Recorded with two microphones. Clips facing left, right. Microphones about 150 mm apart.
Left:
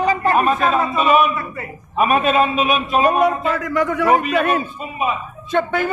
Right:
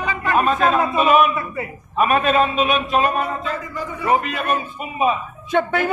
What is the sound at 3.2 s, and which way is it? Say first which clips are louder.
A man's voice: left 8 dB; 75° left (ahead or behind).